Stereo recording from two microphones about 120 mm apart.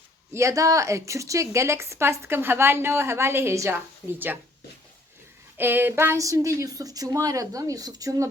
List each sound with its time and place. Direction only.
0.3 s a woman's voice: 25° right (ahead or behind)
5.5 s a woman's voice: 15° right (ahead or behind)